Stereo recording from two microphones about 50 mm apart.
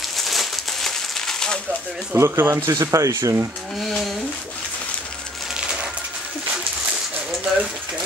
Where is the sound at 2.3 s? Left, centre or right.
Right.